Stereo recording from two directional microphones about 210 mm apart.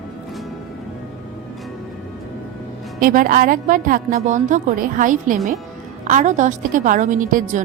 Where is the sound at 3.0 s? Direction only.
40° right (ahead or behind).